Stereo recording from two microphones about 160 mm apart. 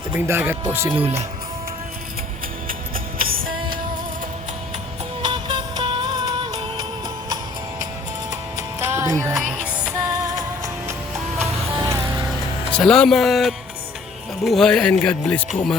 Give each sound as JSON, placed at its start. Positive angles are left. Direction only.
{"t": 0.1, "sound": "speech", "side_deg": -15}
{"t": 0.9, "sound": "speech", "side_deg": -35}
{"t": 2.6, "sound": "music", "side_deg": -60}
{"t": 5.2, "sound": "music", "side_deg": -30}
{"t": 8.3, "sound": "music", "side_deg": -20}
{"t": 11.8, "sound": "music", "side_deg": -20}
{"t": 12.7, "sound": "speech", "side_deg": 5}